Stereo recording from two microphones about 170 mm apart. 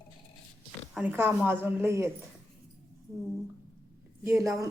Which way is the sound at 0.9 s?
10° right (ahead or behind).